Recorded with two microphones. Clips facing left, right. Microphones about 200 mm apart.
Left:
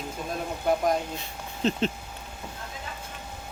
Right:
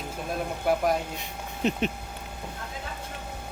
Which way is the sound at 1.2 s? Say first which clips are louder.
Even; 15° right (ahead or behind).